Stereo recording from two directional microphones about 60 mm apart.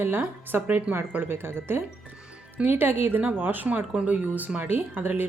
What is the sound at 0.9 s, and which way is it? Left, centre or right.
Speech, right.